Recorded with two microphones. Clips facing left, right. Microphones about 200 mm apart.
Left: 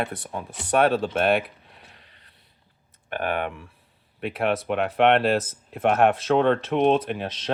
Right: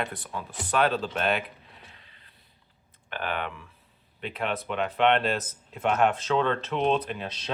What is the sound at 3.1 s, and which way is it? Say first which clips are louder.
Speech: left 5 dB; 50° left (ahead or behind).